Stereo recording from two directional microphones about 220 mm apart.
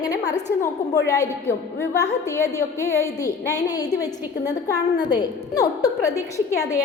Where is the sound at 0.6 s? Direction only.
15° left (ahead or behind).